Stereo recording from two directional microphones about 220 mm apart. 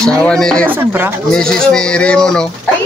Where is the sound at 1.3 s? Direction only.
5° left (ahead or behind).